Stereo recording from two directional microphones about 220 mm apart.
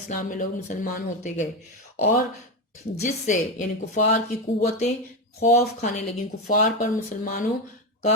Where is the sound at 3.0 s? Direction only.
35° left (ahead or behind).